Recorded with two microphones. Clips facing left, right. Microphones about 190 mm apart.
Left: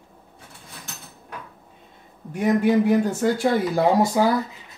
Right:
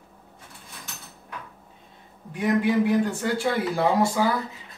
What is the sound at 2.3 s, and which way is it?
Speech, 45° left (ahead or behind).